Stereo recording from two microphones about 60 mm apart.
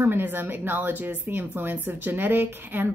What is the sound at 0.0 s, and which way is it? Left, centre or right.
A woman's voice, right.